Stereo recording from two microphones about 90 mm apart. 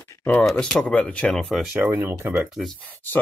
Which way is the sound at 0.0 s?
15° left (ahead or behind).